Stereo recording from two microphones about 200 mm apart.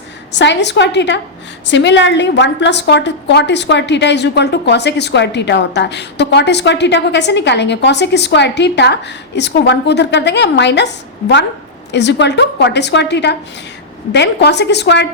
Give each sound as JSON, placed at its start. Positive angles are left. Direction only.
{"t": 0.3, "sound": "a woman's voice", "side_deg": 60}
{"t": 11.9, "sound": "a woman's voice", "side_deg": 60}